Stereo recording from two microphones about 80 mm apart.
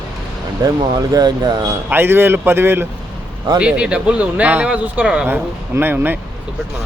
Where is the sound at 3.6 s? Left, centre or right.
Centre.